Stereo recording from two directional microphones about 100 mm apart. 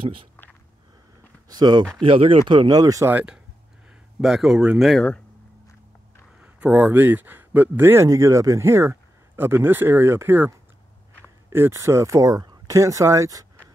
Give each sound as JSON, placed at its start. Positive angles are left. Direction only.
{"t": 1.5, "sound": "speech", "side_deg": -45}
{"t": 2.0, "sound": "speech", "side_deg": -60}
{"t": 3.1, "sound": "speech", "side_deg": -15}
{"t": 4.2, "sound": "speech", "side_deg": -5}
{"t": 6.4, "sound": "speech", "side_deg": -15}
{"t": 11.5, "sound": "speech", "side_deg": -25}